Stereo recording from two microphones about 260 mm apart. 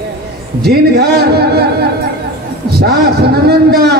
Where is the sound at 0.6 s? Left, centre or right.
Right.